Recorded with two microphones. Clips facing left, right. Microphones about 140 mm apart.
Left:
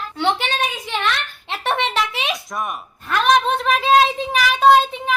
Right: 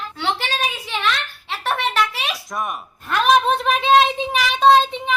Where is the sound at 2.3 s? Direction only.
Centre (ahead or behind).